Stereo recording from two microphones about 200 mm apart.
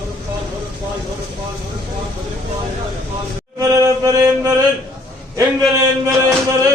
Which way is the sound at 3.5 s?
15° right (ahead or behind).